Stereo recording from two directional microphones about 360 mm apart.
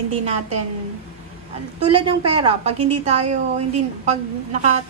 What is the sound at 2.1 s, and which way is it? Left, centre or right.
A woman's voice, centre.